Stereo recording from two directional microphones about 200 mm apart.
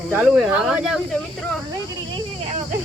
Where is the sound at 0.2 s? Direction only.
5° right (ahead or behind).